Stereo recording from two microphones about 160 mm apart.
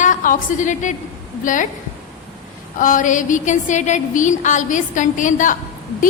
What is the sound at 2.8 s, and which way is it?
A woman's voice, 55° left (ahead or behind).